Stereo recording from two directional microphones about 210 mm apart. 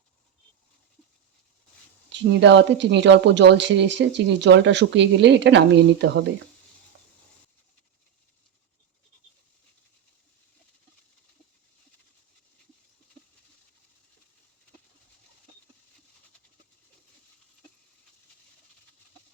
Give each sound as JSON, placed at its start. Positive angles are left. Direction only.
{"t": 2.3, "sound": "speech", "side_deg": -60}